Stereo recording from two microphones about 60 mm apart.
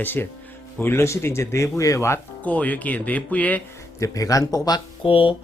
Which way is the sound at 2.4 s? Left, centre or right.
Left.